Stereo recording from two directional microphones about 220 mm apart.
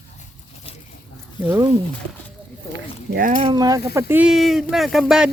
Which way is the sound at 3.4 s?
15° right (ahead or behind).